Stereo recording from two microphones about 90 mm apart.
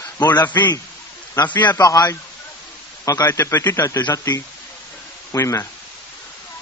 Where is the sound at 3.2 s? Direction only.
25° left (ahead or behind).